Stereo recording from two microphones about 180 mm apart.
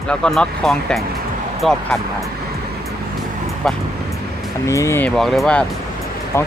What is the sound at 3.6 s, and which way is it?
Speech, 5° left (ahead or behind).